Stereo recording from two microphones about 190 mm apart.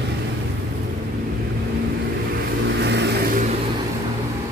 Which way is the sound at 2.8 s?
65° right (ahead or behind).